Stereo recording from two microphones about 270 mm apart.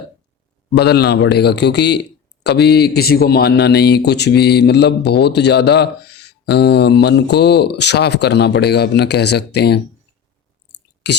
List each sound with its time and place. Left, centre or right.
0.8 s speech: left
11.1 s speech: left